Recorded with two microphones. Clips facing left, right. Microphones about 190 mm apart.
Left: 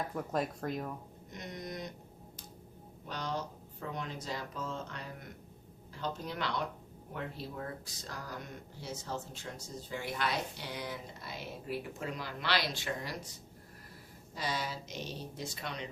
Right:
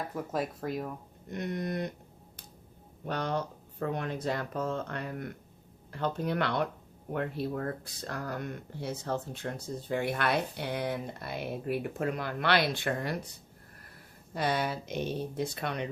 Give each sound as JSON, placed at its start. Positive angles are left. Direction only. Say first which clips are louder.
{"t": 0.1, "sound": "speech", "louder": "right 1 dB", "side_deg": 0}
{"t": 1.3, "sound": "speech", "louder": "right 9 dB", "side_deg": -60}
{"t": 3.1, "sound": "speech", "louder": "right 6 dB", "side_deg": -60}
{"t": 14.3, "sound": "speech", "louder": "right 7 dB", "side_deg": -60}